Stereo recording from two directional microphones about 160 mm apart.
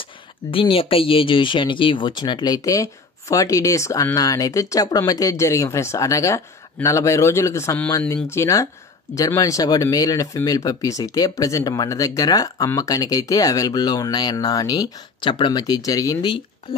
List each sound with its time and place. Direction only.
0.5 s speech: 35° left (ahead or behind)